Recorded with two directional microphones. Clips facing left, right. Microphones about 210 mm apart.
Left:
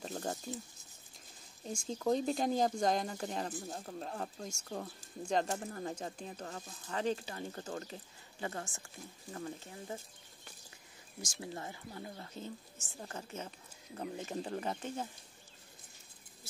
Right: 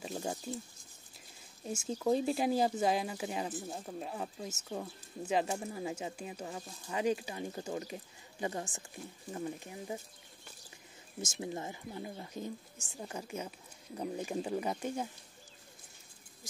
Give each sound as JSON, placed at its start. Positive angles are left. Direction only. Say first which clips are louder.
{"t": 0.0, "sound": "a sound", "louder": "right 1 dB", "side_deg": -5}
{"t": 1.6, "sound": "speech", "louder": "right 2 dB", "side_deg": -5}
{"t": 11.1, "sound": "speech", "louder": "right 5 dB", "side_deg": -20}